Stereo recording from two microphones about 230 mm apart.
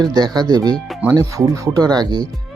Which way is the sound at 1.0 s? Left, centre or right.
Centre.